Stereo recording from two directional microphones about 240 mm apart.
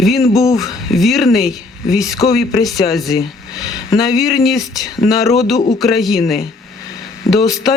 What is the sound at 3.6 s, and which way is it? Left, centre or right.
Speech, centre.